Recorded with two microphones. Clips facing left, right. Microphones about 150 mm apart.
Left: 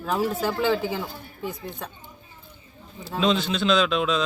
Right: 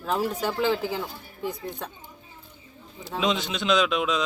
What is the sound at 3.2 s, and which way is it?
A man's voice, 15° right (ahead or behind).